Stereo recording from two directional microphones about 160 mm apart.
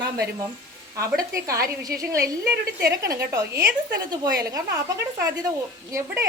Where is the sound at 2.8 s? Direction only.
20° right (ahead or behind).